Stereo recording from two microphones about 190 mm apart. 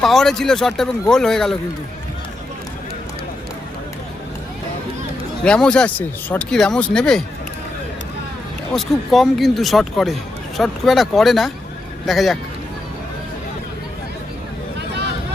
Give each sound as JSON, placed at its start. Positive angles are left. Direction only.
{"t": 0.0, "sound": "speech", "side_deg": 0}
{"t": 5.5, "sound": "speech", "side_deg": 5}
{"t": 8.7, "sound": "speech", "side_deg": 0}
{"t": 14.8, "sound": "a sound", "side_deg": -65}